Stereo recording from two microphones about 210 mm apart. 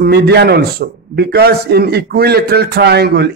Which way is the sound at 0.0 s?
50° right (ahead or behind).